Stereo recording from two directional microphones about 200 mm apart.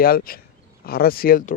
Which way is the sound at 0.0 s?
50° left (ahead or behind).